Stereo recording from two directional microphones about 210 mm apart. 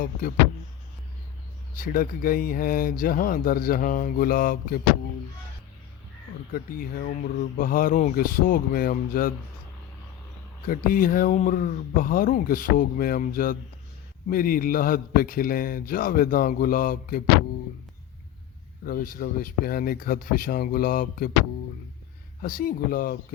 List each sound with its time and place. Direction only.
0.0 s a man's voice: 45° left (ahead or behind)
1.8 s a man's voice: 40° left (ahead or behind)
6.5 s a man's voice: 45° left (ahead or behind)
10.7 s a man's voice: 40° left (ahead or behind)
18.9 s a man's voice: 45° left (ahead or behind)
22.4 s speech: 40° left (ahead or behind)